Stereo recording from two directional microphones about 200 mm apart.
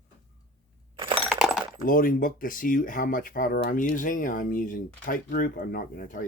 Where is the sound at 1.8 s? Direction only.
45° left (ahead or behind).